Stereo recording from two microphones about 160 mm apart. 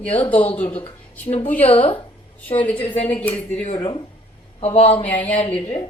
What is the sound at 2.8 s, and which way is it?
Speech, 35° left (ahead or behind).